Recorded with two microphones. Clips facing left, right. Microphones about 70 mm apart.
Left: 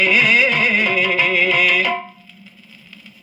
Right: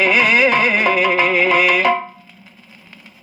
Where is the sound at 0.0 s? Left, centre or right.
Right.